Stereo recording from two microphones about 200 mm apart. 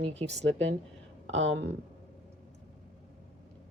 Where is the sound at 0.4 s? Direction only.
65° right (ahead or behind).